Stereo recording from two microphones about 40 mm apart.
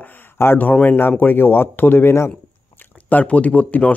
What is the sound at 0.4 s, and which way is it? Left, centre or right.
Speech, left.